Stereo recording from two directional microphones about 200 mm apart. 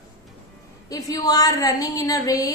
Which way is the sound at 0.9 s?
20° left (ahead or behind).